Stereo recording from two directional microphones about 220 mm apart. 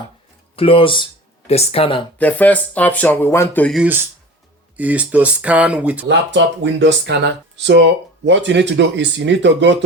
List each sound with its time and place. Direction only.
0.5 s speech: 25° left (ahead or behind)
2.1 s speech: 5° left (ahead or behind)
3.8 s speech: 10° right (ahead or behind)
6.1 s speech: 55° right (ahead or behind)